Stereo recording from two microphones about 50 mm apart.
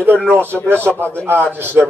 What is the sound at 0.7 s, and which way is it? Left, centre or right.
A man's voice, right.